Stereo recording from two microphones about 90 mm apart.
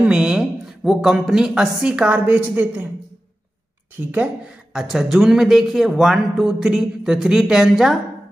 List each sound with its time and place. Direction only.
0.0 s a woman's voice: 5° right (ahead or behind)
4.1 s a woman's voice: 20° right (ahead or behind)
4.7 s speech: 5° right (ahead or behind)